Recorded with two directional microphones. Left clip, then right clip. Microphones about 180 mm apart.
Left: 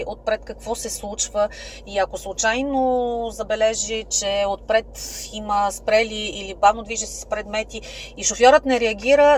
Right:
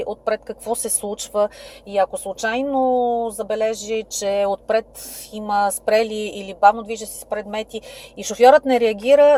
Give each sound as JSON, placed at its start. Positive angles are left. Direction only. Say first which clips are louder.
{"t": 0.0, "sound": "a woman's voice", "louder": "right 1 dB", "side_deg": -55}